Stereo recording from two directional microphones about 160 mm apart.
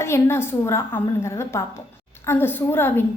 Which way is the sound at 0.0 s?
15° left (ahead or behind).